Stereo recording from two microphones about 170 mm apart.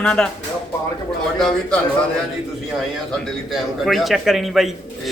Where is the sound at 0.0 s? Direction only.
5° left (ahead or behind).